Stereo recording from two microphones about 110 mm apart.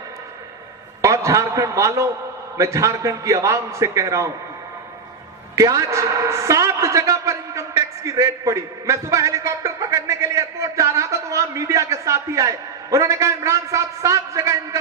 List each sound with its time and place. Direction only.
1.0 s a man's voice: 30° right (ahead or behind)
5.5 s a man's voice: 30° right (ahead or behind)